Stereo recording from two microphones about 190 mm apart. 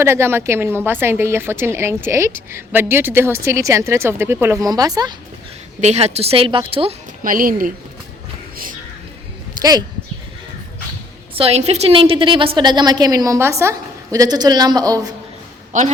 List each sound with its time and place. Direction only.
0.0 s a woman's voice: 15° right (ahead or behind)
5.8 s a woman's voice: 35° right (ahead or behind)
7.2 s speech: 45° right (ahead or behind)
9.6 s speech: 20° right (ahead or behind)
11.3 s a woman's voice: 30° right (ahead or behind)
15.7 s a woman's voice: 40° right (ahead or behind)